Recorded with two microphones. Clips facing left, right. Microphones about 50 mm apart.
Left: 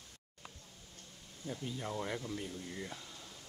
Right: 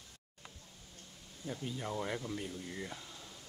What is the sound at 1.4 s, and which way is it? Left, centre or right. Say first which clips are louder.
Speech: right 1 dB; centre.